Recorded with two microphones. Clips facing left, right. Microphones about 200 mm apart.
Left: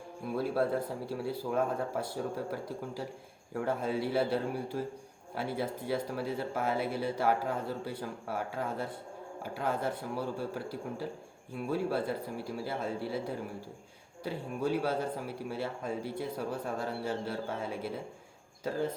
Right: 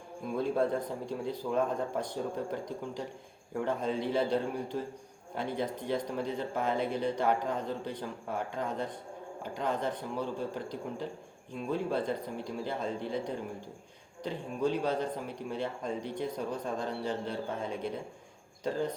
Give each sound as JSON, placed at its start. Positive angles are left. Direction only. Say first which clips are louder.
{"t": 0.3, "sound": "a man's voice", "louder": "right 1 dB", "side_deg": 5}